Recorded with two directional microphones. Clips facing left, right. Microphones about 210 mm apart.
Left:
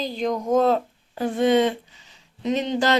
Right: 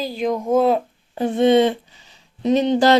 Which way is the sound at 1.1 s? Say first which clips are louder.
Right 4 dB; 25° right (ahead or behind).